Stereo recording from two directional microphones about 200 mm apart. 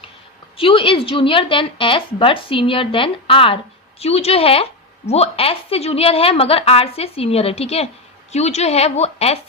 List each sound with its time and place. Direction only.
0.5 s a woman's voice: 25° left (ahead or behind)